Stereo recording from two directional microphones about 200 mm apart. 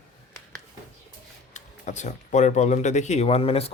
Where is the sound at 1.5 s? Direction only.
35° left (ahead or behind).